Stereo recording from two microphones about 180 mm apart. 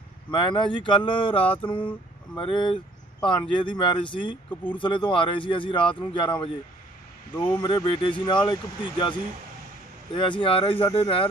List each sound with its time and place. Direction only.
0.3 s speech: 25° left (ahead or behind)
10.2 s speech: 25° left (ahead or behind)